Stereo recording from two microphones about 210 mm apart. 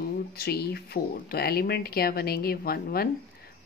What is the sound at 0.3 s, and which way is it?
Speech, 50° left (ahead or behind).